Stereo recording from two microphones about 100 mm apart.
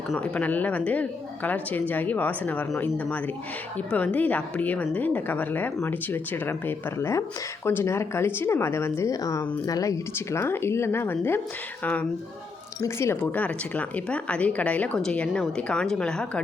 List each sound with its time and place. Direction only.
0.2 s a woman's voice: 15° left (ahead or behind)